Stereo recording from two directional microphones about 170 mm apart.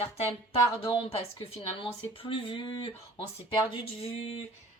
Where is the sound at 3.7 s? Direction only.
35° left (ahead or behind).